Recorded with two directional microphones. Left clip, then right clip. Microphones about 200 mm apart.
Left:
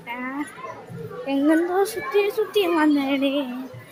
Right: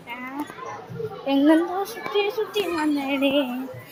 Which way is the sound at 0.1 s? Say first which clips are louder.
Left 4 dB; 15° left (ahead or behind).